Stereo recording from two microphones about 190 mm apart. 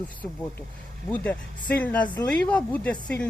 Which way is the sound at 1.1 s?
10° left (ahead or behind).